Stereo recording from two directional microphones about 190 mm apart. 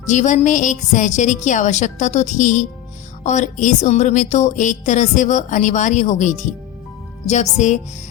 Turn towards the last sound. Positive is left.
turn(degrees=40)  # may be behind; listen again after turning